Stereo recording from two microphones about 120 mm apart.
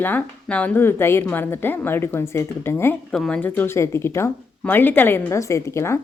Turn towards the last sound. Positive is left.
turn(degrees=25)  # may be behind; listen again after turning